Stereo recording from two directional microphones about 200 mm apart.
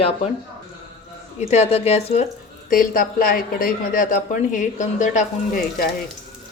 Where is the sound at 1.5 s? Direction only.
30° left (ahead or behind).